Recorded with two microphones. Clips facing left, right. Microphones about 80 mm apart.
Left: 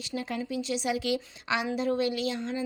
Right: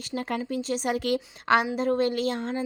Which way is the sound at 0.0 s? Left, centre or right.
Right.